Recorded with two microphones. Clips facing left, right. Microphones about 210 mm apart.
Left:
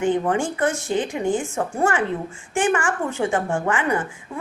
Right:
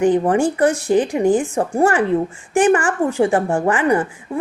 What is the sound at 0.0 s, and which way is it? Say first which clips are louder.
A woman's voice: right 6 dB; 35° right (ahead or behind).